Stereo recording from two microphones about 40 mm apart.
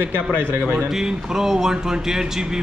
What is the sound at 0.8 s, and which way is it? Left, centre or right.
Speech, centre.